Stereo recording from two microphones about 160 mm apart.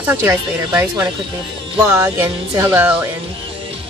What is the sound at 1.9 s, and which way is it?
A woman's voice, 15° right (ahead or behind).